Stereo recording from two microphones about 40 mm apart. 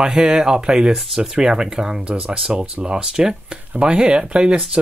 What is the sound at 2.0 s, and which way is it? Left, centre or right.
Speech, right.